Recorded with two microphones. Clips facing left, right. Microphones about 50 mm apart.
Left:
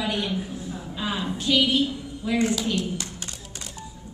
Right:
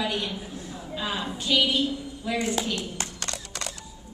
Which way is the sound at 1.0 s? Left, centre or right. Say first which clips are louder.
Left 2 dB; centre.